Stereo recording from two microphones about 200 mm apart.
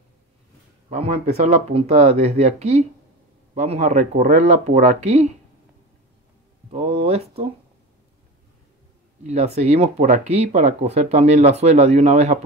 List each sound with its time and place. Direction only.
0.8 s speech: 35° right (ahead or behind)
6.7 s speech: 30° right (ahead or behind)
9.2 s speech: 35° right (ahead or behind)